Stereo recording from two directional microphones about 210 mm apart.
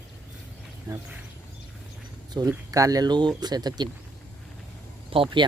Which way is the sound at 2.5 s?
15° right (ahead or behind).